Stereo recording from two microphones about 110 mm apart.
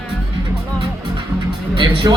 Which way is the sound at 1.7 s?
45° right (ahead or behind).